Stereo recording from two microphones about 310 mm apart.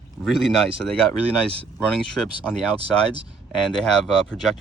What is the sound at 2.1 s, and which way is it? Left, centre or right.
Speech, centre.